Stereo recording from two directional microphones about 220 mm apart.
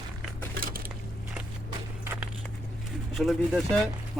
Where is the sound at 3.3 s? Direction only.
Centre (ahead or behind).